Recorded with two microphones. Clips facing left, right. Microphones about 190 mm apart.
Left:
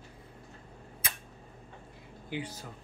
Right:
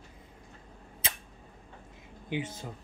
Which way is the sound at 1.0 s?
25° right (ahead or behind).